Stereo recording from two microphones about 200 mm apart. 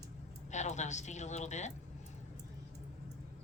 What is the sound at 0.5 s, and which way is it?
A woman's voice, 35° left (ahead or behind).